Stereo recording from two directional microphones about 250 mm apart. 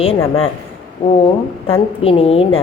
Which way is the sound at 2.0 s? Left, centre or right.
Left.